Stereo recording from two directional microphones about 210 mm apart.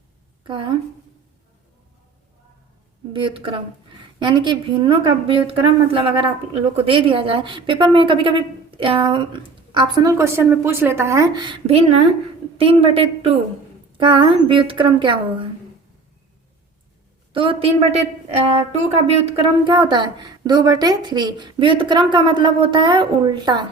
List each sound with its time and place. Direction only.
0.4 s a woman's voice: 25° right (ahead or behind)
3.1 s a woman's voice: 25° right (ahead or behind)
11.6 s a woman's voice: 30° right (ahead or behind)
17.3 s a woman's voice: 25° right (ahead or behind)